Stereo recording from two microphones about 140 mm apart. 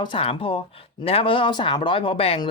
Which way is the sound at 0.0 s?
40° left (ahead or behind).